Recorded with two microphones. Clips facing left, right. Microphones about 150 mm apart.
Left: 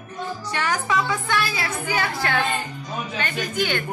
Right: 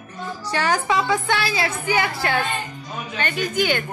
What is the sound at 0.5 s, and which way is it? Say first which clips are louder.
A woman's voice: right 3 dB; 35° right (ahead or behind).